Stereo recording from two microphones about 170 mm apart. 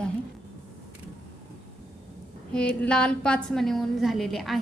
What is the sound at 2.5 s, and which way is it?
A woman's voice, 5° left (ahead or behind).